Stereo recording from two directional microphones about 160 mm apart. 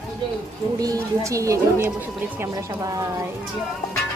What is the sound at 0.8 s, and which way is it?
A child's voice, 20° right (ahead or behind).